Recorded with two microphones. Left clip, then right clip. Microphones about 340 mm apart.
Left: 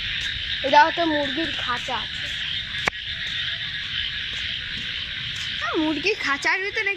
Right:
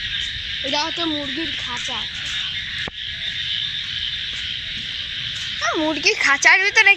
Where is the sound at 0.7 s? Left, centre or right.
Left.